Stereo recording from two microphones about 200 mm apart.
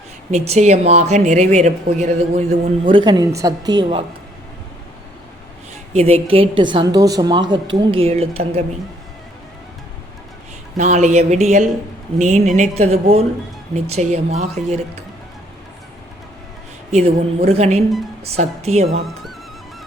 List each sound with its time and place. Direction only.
0.3 s speech: 35° right (ahead or behind)
5.9 s a woman's voice: 30° right (ahead or behind)
10.8 s speech: 35° right (ahead or behind)
16.9 s speech: 30° right (ahead or behind)